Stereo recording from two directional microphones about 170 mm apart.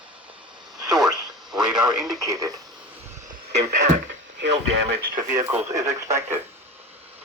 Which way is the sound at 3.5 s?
75° right (ahead or behind).